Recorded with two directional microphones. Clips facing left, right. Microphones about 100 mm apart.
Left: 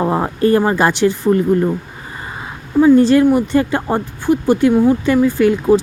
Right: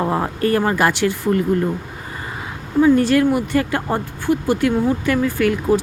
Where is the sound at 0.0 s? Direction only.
20° left (ahead or behind).